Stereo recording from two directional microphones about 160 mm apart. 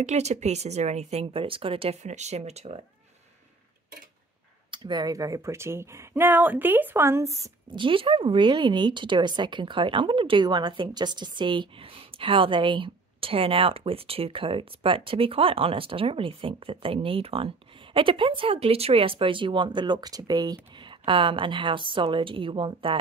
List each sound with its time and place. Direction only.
0.0 s speech: 45° right (ahead or behind)
4.6 s speech: 30° right (ahead or behind)
7.7 s speech: 30° right (ahead or behind)